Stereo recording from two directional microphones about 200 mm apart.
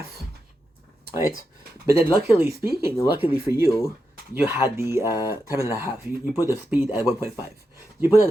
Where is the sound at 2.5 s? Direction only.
50° right (ahead or behind).